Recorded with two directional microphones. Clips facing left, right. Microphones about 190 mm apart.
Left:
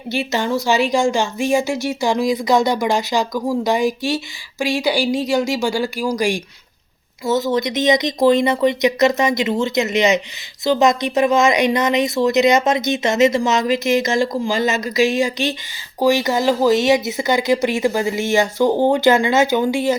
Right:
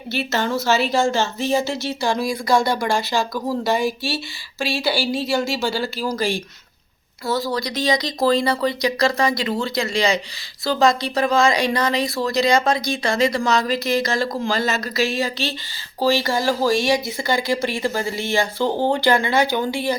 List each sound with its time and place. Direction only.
0.3 s speech: 15° left (ahead or behind)